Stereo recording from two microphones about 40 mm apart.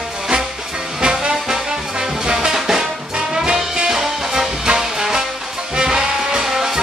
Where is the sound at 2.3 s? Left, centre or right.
Centre.